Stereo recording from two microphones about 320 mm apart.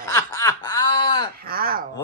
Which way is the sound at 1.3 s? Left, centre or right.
Right.